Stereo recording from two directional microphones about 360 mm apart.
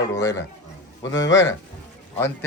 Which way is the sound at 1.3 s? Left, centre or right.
Left.